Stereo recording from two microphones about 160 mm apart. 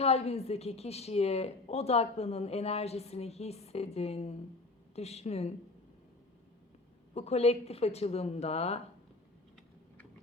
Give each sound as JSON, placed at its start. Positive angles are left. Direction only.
{"t": 0.0, "sound": "speech", "side_deg": 40}
{"t": 7.1, "sound": "speech", "side_deg": 40}